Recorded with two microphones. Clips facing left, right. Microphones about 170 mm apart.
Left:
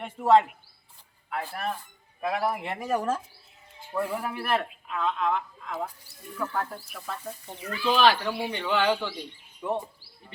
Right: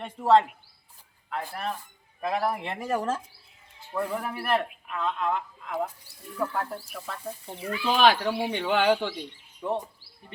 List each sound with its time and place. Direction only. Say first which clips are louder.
0.0 s a man's voice: even; 5° left (ahead or behind); by 9.1 s 15° right (ahead or behind)
9.6 s speech: even; 5° left (ahead or behind)